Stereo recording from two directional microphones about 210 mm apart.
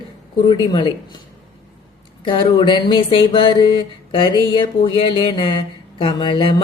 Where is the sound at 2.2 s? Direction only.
20° left (ahead or behind).